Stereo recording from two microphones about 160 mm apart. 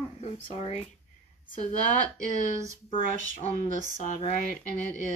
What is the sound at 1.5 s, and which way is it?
Speech, 55° left (ahead or behind).